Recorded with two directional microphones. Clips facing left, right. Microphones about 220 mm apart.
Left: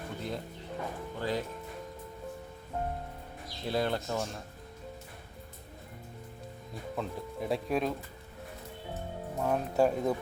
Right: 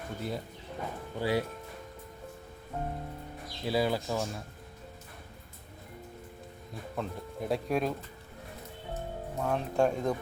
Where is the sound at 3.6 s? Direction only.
5° right (ahead or behind).